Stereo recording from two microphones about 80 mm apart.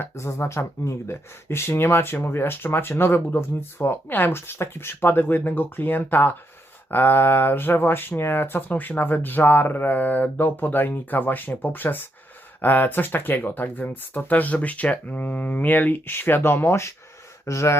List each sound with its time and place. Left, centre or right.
0.0 s speech: left